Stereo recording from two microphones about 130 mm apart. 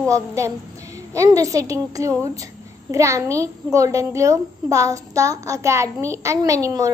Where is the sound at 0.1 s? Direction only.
25° right (ahead or behind).